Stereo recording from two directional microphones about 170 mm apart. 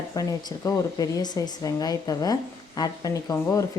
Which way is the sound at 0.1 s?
20° left (ahead or behind).